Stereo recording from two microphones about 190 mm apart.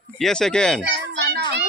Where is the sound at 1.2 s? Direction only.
60° right (ahead or behind).